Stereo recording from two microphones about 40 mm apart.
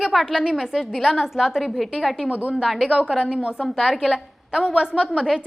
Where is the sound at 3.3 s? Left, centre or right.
Right.